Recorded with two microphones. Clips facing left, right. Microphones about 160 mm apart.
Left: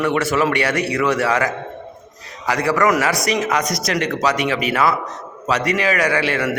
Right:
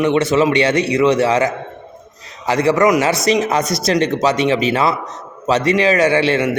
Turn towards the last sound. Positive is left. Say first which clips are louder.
# right 4 dB
turn(degrees=-25)  # may be behind; listen again after turning